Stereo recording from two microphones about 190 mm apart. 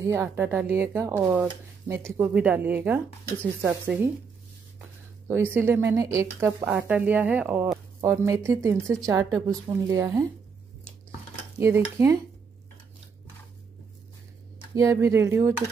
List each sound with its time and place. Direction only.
0.0 s speech: 15° right (ahead or behind)
5.3 s speech: 10° right (ahead or behind)
11.6 s speech: 15° right (ahead or behind)
14.8 s speech: 15° right (ahead or behind)